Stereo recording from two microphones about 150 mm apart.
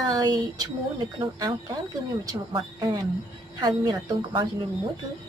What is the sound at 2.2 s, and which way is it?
A woman's voice, 30° right (ahead or behind).